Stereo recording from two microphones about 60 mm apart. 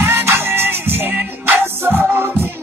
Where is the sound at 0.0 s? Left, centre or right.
Right.